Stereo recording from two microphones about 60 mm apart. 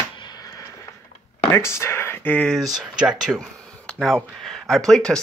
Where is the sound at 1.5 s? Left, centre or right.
Left.